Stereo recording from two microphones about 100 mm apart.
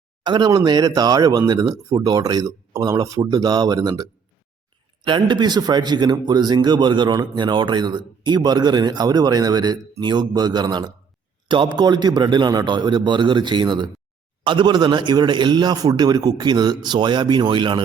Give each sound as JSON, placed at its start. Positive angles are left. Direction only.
{"t": 0.2, "sound": "speech", "side_deg": -50}
{"t": 5.0, "sound": "a man's voice", "side_deg": -50}